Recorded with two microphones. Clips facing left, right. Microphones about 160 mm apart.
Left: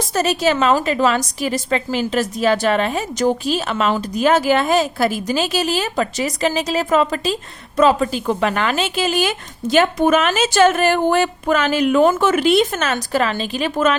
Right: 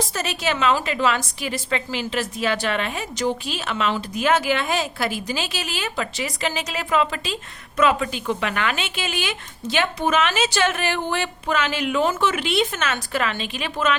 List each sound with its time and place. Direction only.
0.1 s a woman's voice: 40° left (ahead or behind)